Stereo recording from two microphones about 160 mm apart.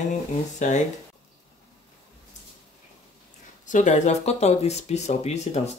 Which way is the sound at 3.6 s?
50° left (ahead or behind).